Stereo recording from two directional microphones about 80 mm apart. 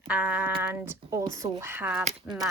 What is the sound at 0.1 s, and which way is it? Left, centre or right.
Speech, centre.